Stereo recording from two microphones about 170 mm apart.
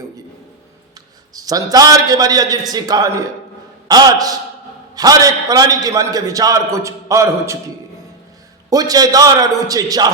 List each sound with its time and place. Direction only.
1.3 s a man's voice: 20° right (ahead or behind)
8.7 s a man's voice: 20° right (ahead or behind)